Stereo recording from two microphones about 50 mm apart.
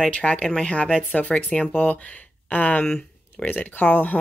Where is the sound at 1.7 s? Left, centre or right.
Left.